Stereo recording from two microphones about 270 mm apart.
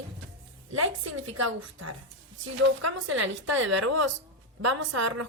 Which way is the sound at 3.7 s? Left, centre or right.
Right.